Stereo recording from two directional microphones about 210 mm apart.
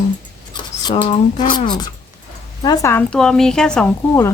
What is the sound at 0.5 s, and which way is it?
Speech, 20° left (ahead or behind).